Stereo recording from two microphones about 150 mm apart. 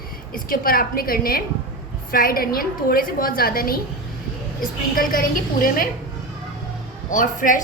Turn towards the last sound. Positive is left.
turn(degrees=60)  # may be behind; listen again after turning